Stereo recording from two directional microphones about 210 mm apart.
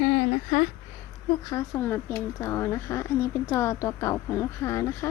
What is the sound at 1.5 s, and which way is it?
Speech, 15° left (ahead or behind).